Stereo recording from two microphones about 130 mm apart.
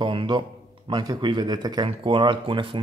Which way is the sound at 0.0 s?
40° right (ahead or behind).